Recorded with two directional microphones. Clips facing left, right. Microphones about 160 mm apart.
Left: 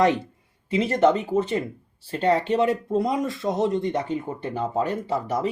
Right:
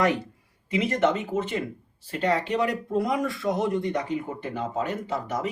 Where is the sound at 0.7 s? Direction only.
30° left (ahead or behind).